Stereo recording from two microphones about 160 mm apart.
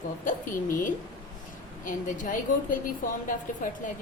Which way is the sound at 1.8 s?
55° left (ahead or behind).